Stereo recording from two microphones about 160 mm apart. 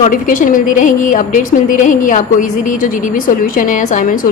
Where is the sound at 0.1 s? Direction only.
60° left (ahead or behind).